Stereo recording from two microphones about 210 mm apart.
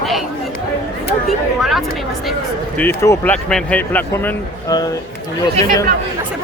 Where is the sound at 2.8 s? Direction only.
10° left (ahead or behind).